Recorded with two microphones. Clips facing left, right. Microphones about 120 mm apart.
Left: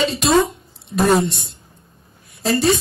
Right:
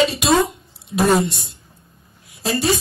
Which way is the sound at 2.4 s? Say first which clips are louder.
Left 3 dB; centre (ahead or behind).